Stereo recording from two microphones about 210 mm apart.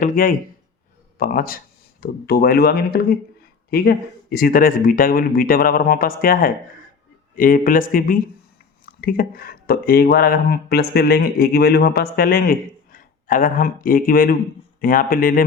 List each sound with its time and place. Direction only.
0.0 s speech: 40° left (ahead or behind)